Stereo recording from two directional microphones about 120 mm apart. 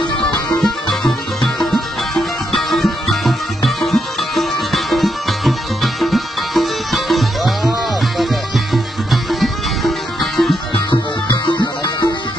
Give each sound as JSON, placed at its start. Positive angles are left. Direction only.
{"t": 0.6, "sound": "music", "side_deg": 5}
{"t": 8.7, "sound": "sitar", "side_deg": 0}
{"t": 10.9, "sound": "music", "side_deg": 40}